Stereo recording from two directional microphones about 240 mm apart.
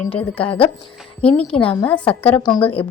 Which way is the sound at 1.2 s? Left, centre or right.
Left.